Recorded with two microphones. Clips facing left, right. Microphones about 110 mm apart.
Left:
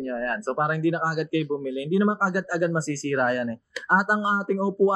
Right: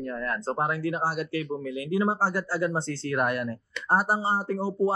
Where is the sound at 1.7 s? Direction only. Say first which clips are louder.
Left 2 dB; 30° left (ahead or behind).